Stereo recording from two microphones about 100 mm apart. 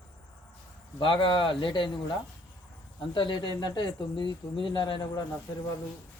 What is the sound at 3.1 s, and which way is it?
Speech, 50° left (ahead or behind).